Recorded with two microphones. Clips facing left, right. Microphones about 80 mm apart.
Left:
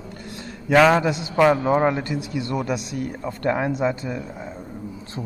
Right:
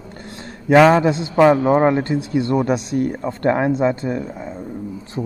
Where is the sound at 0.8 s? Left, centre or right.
Right.